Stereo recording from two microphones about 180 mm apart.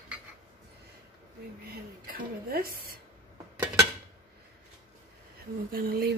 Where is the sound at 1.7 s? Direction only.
55° right (ahead or behind).